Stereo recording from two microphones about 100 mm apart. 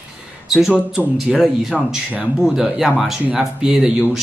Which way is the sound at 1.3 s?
5° right (ahead or behind).